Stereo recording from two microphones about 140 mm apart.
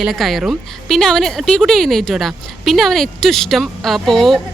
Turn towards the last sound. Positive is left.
turn(degrees=0)  # may be behind; listen again after turning